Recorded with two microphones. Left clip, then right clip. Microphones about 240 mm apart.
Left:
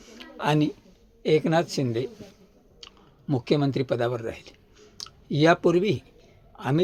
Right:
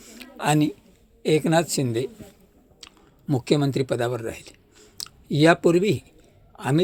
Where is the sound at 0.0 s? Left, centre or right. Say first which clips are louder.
Right 2 dB; centre.